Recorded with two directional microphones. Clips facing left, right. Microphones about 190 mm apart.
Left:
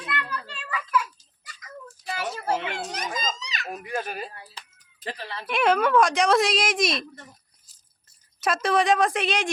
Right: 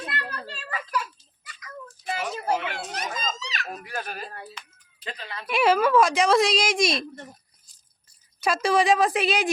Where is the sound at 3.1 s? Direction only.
Centre (ahead or behind).